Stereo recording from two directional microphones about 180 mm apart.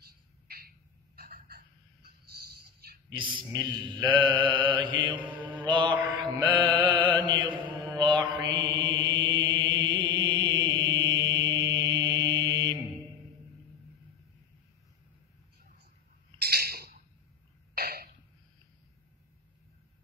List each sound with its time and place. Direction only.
0.0 s bird: 60° right (ahead or behind)
2.6 s a sound: 60° right (ahead or behind)
3.1 s mantra: 25° right (ahead or behind)
5.4 s mantra: 10° right (ahead or behind)
5.7 s mantra: 25° right (ahead or behind)
16.3 s bird: 60° right (ahead or behind)
17.7 s throat clearing: 60° right (ahead or behind)